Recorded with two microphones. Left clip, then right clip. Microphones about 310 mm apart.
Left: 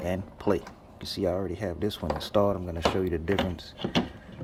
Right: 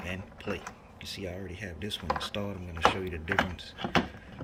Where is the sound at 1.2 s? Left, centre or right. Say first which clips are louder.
Left 13 dB; left.